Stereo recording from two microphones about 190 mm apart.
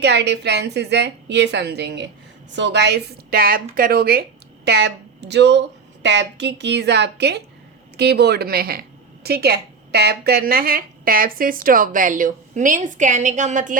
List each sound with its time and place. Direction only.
0.0 s a woman's voice: 65° right (ahead or behind); by 13.7 s 40° right (ahead or behind)